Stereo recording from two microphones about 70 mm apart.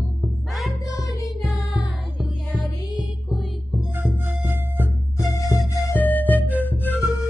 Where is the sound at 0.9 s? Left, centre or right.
Left.